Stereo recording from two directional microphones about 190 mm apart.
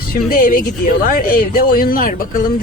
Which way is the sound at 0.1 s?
50° left (ahead or behind).